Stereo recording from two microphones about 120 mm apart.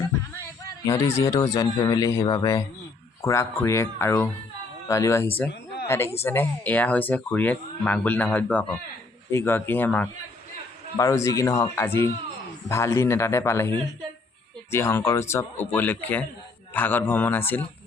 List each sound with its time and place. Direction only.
0.9 s speech: 25° left (ahead or behind)
2.2 s speech: 35° left (ahead or behind)
3.2 s speech: 25° left (ahead or behind)
10.9 s speech: 25° left (ahead or behind)